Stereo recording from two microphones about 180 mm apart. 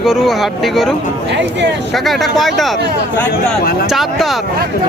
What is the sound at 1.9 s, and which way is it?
Speech, centre (ahead or behind).